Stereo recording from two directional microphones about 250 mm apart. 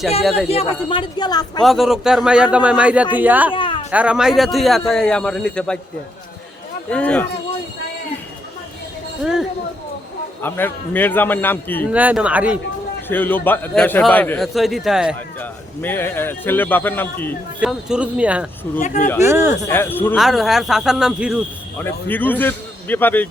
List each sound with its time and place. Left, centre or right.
0.4 s a man's voice: left
1.6 s a man's voice: centre
3.5 s a sound: centre
3.9 s a man's voice: centre
6.9 s a man's voice: centre
9.2 s a man's voice: centre
11.9 s a man's voice: centre
13.1 s a man's voice: centre
17.6 s a man's voice: centre
19.6 s a man's voice: centre
21.8 s a man's voice: centre